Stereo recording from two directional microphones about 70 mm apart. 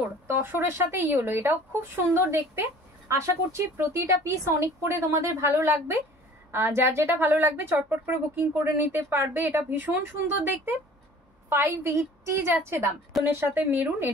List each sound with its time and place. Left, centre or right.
0.4 s speech: right